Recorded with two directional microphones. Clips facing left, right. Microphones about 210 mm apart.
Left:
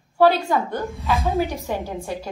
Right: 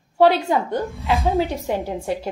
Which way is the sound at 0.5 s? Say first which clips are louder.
Right 2 dB; 15° right (ahead or behind).